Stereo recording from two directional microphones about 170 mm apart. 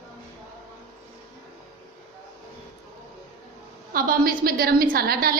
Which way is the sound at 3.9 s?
60° right (ahead or behind).